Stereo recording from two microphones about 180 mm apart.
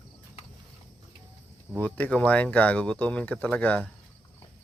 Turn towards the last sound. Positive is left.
turn(degrees=10)  # may be behind; listen again after turning